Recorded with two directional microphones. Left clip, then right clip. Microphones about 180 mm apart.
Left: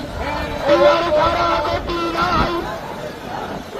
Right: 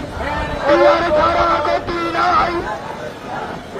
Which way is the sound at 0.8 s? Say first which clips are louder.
Right 1 dB; 15° right (ahead or behind).